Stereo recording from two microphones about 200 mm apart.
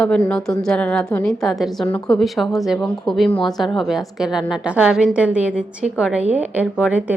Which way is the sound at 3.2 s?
25° left (ahead or behind).